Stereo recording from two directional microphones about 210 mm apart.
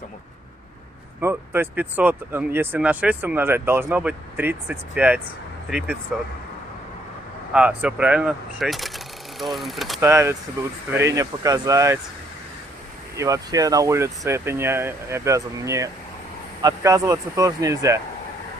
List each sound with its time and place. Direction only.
1.2 s speech: 10° right (ahead or behind)
7.5 s speech: 5° right (ahead or behind)
10.0 s speech: 15° right (ahead or behind)
13.1 s speech: 15° right (ahead or behind)